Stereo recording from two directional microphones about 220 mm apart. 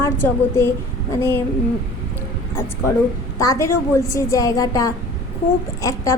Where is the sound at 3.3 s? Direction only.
15° left (ahead or behind).